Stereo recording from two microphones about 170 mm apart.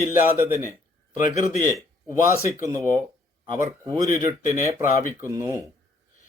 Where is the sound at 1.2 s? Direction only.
50° left (ahead or behind).